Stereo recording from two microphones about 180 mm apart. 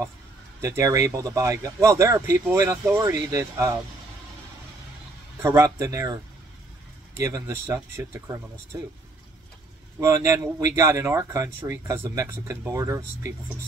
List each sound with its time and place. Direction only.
0.6 s speech: 15° right (ahead or behind)
5.4 s speech: 15° right (ahead or behind)
7.2 s speech: 15° right (ahead or behind)
9.9 s speech: 15° right (ahead or behind)